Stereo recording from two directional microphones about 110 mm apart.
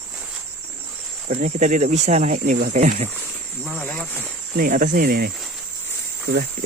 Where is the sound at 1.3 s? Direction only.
90° right.